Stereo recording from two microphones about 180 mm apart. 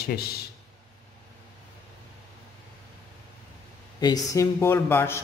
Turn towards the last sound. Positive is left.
turn(degrees=15)  # may be behind; listen again after turning